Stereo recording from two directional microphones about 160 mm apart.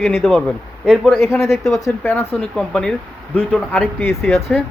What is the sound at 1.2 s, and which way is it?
Speech, 15° left (ahead or behind).